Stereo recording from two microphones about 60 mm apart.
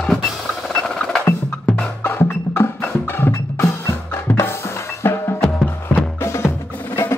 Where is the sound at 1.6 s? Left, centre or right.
Left.